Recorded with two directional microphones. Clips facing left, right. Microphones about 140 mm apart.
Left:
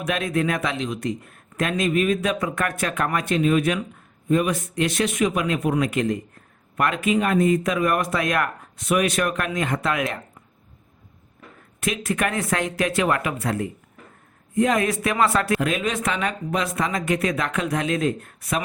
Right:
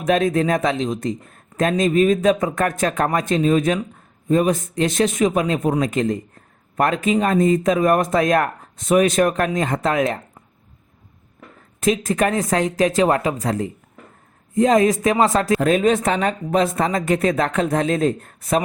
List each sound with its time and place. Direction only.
0.0 s speech: 40° right (ahead or behind)
11.8 s speech: 40° right (ahead or behind)